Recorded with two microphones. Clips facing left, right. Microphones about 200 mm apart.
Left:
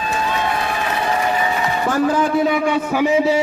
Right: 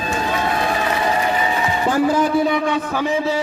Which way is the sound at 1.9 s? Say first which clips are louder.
Right 1 dB; 10° right (ahead or behind).